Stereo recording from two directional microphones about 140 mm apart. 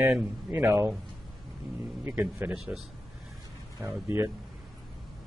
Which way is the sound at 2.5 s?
Centre (ahead or behind).